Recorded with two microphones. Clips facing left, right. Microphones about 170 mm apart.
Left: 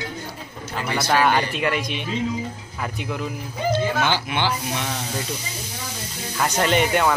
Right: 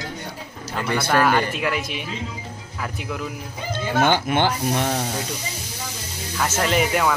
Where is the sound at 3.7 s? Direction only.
50° right (ahead or behind).